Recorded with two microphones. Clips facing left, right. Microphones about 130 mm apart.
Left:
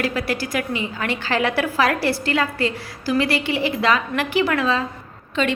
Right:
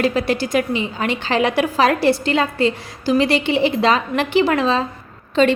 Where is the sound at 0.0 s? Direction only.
25° right (ahead or behind).